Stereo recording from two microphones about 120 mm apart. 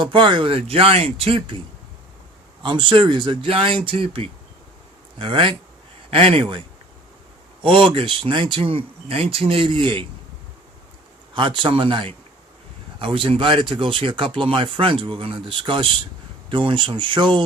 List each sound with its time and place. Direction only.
0.0 s speech: 45° right (ahead or behind)
2.6 s speech: 40° right (ahead or behind)
11.3 s speech: 40° right (ahead or behind)